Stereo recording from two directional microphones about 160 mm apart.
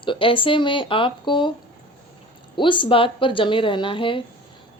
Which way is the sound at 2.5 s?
30° left (ahead or behind).